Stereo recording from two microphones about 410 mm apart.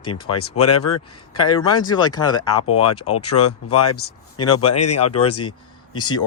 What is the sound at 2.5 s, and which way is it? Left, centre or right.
Speech, left.